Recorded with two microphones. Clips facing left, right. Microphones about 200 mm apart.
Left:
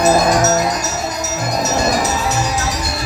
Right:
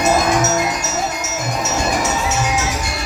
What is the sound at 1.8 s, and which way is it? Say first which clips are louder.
Music: left 1 dB; 35° left (ahead or behind).